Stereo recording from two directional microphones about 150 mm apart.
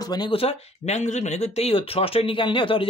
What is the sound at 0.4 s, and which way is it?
Speech, 45° left (ahead or behind).